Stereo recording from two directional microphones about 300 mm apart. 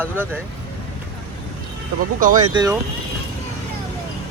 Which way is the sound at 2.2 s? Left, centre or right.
Right.